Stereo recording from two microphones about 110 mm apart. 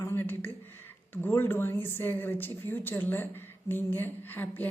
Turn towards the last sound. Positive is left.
turn(degrees=20)  # may be behind; listen again after turning